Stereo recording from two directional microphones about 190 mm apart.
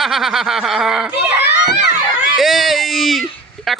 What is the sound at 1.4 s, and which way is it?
Children playing, 60° left (ahead or behind).